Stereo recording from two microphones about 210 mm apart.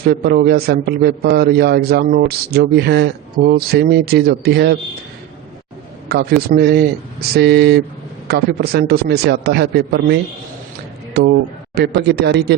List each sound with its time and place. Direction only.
0.0 s a man's voice: 45° right (ahead or behind)
6.1 s a man's voice: 50° right (ahead or behind)
11.7 s a man's voice: 50° right (ahead or behind)